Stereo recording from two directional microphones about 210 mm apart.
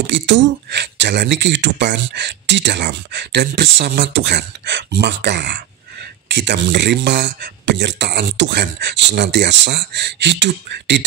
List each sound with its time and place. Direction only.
0.0 s speech: 60° right (ahead or behind)